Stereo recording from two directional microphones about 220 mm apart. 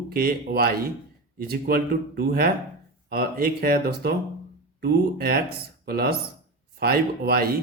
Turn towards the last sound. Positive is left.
turn(degrees=-40)  # may be behind; listen again after turning